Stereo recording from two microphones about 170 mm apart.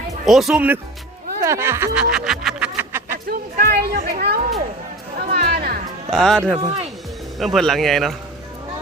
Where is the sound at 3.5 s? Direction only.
70° right (ahead or behind).